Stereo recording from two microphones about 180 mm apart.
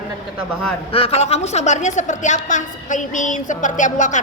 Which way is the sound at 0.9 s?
30° left (ahead or behind).